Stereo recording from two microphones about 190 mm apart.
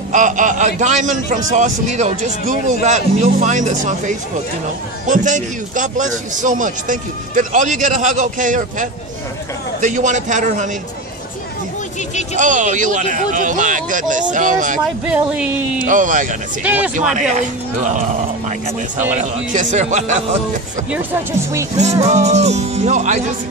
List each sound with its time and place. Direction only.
0.1 s a man's voice: 40° right (ahead or behind)
12.4 s a man's voice: 40° right (ahead or behind)
15.0 s speech: 5° right (ahead or behind)
15.8 s speech: 45° right (ahead or behind)
16.6 s speech: 10° right (ahead or behind)
17.1 s a man's voice: 40° right (ahead or behind)
20.9 s speech: 15° right (ahead or behind)
22.0 s a man's voice: 35° right (ahead or behind)